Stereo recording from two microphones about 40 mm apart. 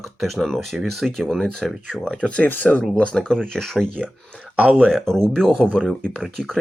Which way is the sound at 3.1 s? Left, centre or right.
Centre.